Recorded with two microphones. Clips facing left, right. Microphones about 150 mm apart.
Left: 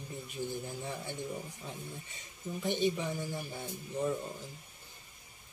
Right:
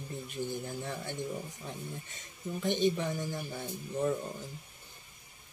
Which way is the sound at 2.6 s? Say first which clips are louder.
Right 2 dB; 10° left (ahead or behind).